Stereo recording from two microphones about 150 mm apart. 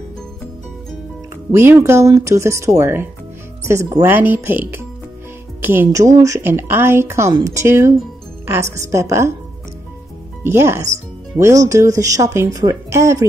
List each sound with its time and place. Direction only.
1.5 s a woman's voice: 15° right (ahead or behind)
10.4 s a woman's voice: 15° right (ahead or behind)